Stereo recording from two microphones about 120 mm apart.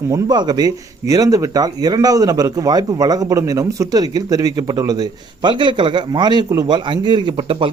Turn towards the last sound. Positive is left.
turn(degrees=-45)  # may be behind; listen again after turning